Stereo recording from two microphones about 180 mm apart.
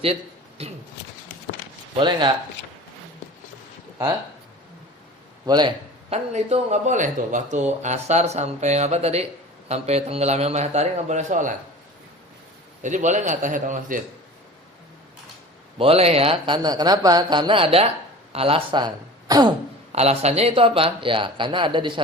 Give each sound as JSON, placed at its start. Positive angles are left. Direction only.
{"t": 2.0, "sound": "speech", "side_deg": -25}
{"t": 5.5, "sound": "speech", "side_deg": -25}
{"t": 6.3, "sound": "a man's voice", "side_deg": -40}
{"t": 12.8, "sound": "speech", "side_deg": -40}
{"t": 15.8, "sound": "a man's voice", "side_deg": -35}
{"t": 19.3, "sound": "throat clearing", "side_deg": -25}
{"t": 19.9, "sound": "speech", "side_deg": -35}